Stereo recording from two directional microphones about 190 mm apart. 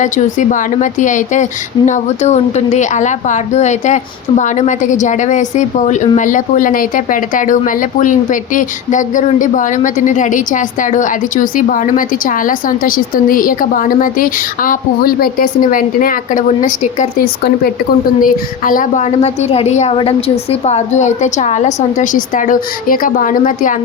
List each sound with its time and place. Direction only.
0.0 s a woman's voice: 40° left (ahead or behind)